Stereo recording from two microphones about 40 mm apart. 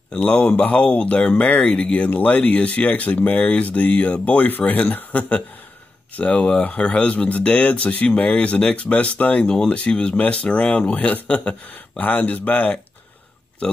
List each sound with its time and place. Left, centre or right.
0.1 s speech: left
6.1 s speech: left
12.0 s speech: left